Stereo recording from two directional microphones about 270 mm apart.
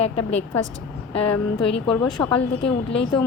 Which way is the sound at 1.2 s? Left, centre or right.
Left.